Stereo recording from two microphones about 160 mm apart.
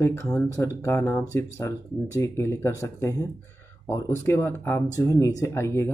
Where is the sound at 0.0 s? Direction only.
15° left (ahead or behind).